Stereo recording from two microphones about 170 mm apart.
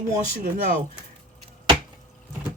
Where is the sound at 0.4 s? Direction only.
60° right (ahead or behind).